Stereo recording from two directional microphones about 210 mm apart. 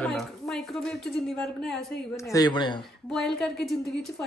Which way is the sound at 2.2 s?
15° left (ahead or behind).